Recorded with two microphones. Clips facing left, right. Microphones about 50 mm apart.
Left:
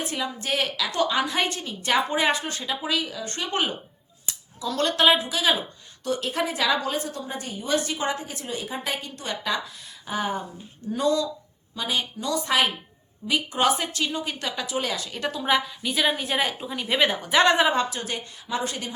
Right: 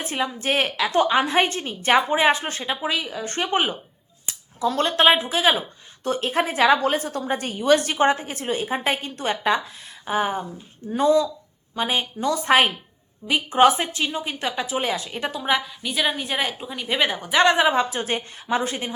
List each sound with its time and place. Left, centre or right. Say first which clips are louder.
0.0 s a woman's voice: right 4 dB; right
2.0 s a woman's voice: right 4 dB; right
3.2 s a woman's voice: right 5 dB; right
4.3 s scissors: right 7 dB; right
4.9 s a woman's voice: right 1 dB; right
10.1 s a woman's voice: right 4 dB; right
15.4 s a woman's voice: even; centre
17.9 s a woman's voice: right 6 dB; right
18.7 s a woman's voice: right 4 dB; right